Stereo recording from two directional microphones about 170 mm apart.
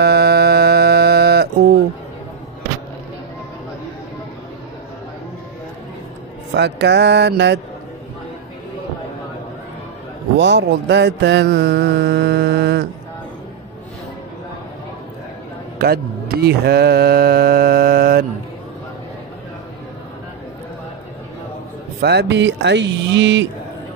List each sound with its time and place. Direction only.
0.0 s a sound: 70° right (ahead or behind)
6.5 s speech: 90° right
10.3 s mantra: 90° right
15.8 s music: 65° right (ahead or behind)
22.0 s speech: 85° right